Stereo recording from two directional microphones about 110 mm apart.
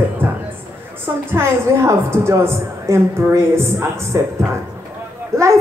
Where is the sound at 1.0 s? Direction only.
25° right (ahead or behind).